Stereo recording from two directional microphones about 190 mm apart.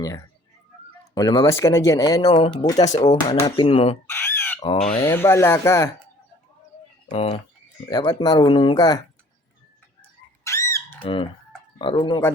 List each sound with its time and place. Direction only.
1.1 s speech: 20° left (ahead or behind)
4.1 s chicken: 10° left (ahead or behind)
4.9 s speech: 10° left (ahead or behind)
7.1 s speech: 35° left (ahead or behind)
7.9 s speech: 20° left (ahead or behind)
10.0 s a sound: 15° left (ahead or behind)
11.0 s speech: 25° left (ahead or behind)